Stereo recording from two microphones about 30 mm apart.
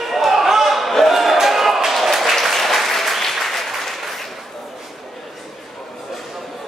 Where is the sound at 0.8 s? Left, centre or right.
Centre.